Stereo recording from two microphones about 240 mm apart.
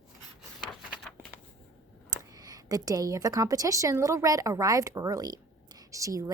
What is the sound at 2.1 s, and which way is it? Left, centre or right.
Speech, centre.